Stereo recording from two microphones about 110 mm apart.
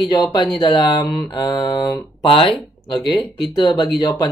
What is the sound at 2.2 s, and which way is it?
Speech, 55° left (ahead or behind).